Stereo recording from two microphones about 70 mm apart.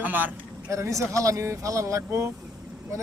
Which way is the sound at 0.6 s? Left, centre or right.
Right.